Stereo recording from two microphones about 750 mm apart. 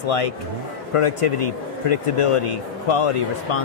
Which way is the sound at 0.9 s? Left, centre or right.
Left.